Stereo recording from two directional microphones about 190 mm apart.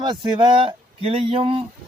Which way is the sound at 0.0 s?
25° right (ahead or behind).